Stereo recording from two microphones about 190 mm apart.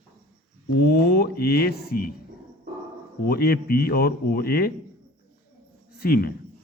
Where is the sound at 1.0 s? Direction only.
55° left (ahead or behind).